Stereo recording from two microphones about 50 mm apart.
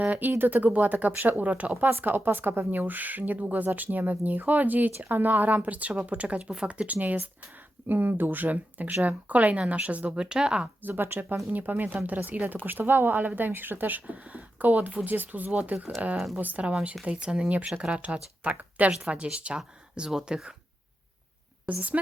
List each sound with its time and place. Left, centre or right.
0.2 s speech: right
2.0 s speech: right
4.9 s speech: right
10.2 s speech: centre
10.8 s speech: right
17.1 s speech: centre
21.7 s speech: right